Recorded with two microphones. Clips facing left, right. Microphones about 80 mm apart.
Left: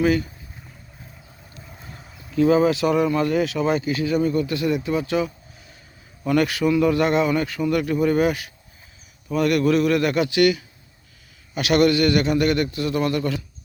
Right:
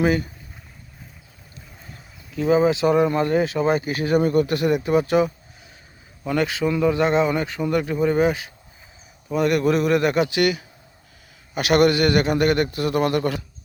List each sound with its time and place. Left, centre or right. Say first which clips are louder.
0.0 s speech: even; right
2.4 s speech: left 1 dB; right
6.2 s speech: left 2 dB; centre
9.4 s speech: left 1 dB; right
11.5 s a man's voice: right 1 dB; right